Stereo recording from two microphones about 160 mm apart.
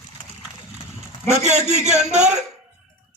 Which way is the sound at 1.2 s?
45° right (ahead or behind).